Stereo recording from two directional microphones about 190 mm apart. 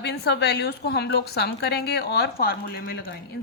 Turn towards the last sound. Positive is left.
turn(degrees=55)  # may be behind; listen again after turning